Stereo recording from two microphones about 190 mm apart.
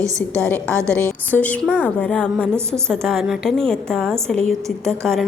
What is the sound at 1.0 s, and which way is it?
A woman's voice, 10° left (ahead or behind).